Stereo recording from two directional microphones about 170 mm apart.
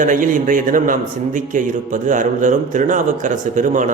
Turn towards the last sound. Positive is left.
turn(degrees=-45)  # may be behind; listen again after turning